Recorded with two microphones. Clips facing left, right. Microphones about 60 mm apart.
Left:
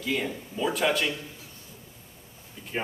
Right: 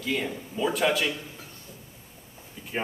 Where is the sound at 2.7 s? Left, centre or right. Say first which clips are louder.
Right 1 dB; centre.